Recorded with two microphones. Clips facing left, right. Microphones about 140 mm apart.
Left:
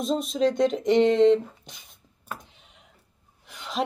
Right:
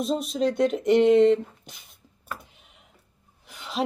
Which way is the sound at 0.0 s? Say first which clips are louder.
Left 1 dB; 5° right (ahead or behind).